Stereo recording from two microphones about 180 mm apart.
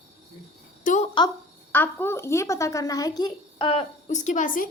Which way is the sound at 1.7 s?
10° left (ahead or behind).